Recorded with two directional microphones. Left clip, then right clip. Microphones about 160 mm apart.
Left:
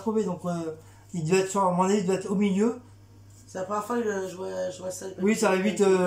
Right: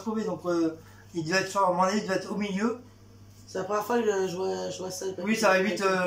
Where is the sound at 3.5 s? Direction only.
10° right (ahead or behind).